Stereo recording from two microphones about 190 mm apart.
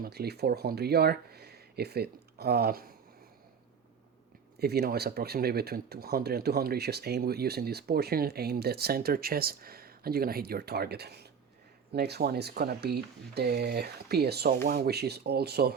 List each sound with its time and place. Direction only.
0.0 s speech: 55° right (ahead or behind)
4.6 s speech: 55° right (ahead or behind)